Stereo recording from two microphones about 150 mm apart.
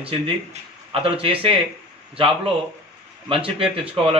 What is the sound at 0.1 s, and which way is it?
A man's voice, 40° right (ahead or behind).